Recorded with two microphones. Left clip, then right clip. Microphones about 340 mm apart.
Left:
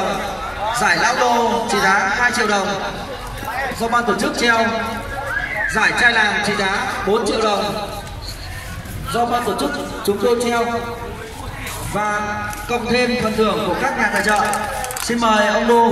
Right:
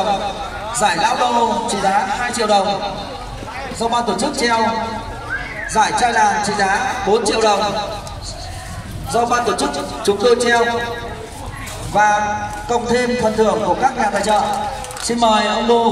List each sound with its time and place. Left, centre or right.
0.7 s a man's voice: centre
3.9 s a man's voice: centre
9.3 s a man's voice: right
12.0 s a man's voice: right